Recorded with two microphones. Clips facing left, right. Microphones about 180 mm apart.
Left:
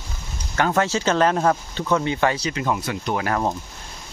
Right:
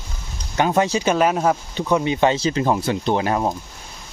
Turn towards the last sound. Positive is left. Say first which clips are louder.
# right 4 dB
turn(degrees=-25)  # may be behind; listen again after turning